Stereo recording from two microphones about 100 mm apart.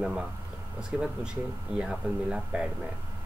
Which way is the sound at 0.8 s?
10° right (ahead or behind).